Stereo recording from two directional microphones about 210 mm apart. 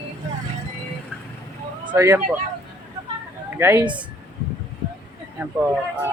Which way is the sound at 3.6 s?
10° right (ahead or behind).